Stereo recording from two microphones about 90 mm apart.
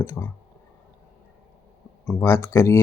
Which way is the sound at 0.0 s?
30° left (ahead or behind).